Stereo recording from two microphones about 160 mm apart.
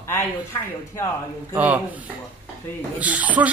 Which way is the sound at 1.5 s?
10° right (ahead or behind).